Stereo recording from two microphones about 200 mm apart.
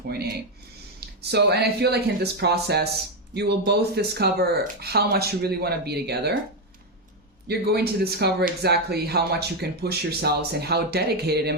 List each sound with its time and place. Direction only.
0.1 s speech: 50° right (ahead or behind)
7.4 s speech: 55° right (ahead or behind)